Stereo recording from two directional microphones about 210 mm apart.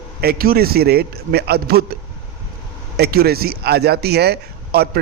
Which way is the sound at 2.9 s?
50° right (ahead or behind).